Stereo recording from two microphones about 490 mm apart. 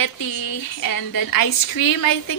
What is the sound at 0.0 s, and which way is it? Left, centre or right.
A woman's voice, left.